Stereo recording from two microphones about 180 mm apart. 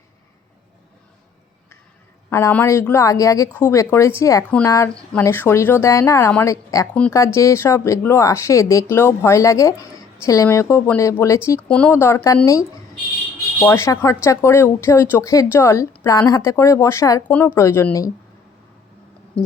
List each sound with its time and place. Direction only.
2.3 s speech: 10° left (ahead or behind)
13.6 s speech: 15° left (ahead or behind)
19.3 s music: 5° left (ahead or behind)